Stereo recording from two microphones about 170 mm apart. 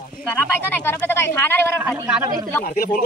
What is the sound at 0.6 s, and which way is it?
Speech, 10° left (ahead or behind).